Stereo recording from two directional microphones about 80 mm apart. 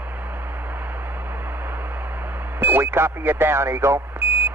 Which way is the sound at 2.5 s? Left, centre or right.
Right.